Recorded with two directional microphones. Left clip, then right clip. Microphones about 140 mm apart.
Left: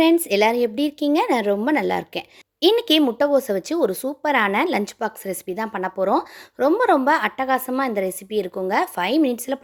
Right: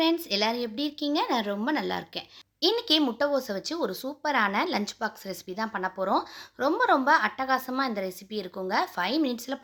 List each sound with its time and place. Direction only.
0.0 s speech: 60° left (ahead or behind)